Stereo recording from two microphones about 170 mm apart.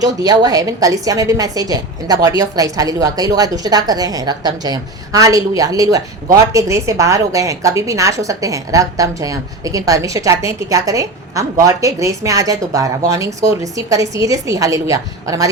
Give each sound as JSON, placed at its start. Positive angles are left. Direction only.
{"t": 0.0, "sound": "a woman's voice", "side_deg": -20}